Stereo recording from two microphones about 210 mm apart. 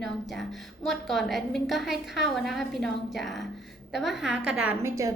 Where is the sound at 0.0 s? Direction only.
Centre (ahead or behind).